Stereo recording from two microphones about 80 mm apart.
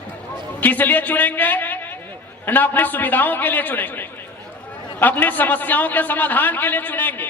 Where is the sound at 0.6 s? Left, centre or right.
Left.